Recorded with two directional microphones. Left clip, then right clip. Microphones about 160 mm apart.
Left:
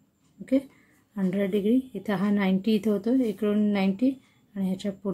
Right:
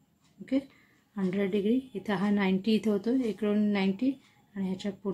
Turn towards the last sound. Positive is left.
turn(degrees=30)  # may be behind; listen again after turning